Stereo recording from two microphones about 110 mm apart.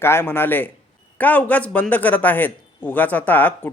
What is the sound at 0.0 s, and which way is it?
A man's voice, 20° left (ahead or behind).